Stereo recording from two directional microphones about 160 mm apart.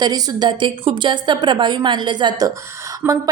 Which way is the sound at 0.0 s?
25° right (ahead or behind).